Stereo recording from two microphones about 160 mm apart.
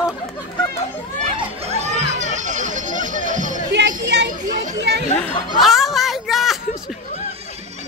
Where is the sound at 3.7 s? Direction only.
90° right.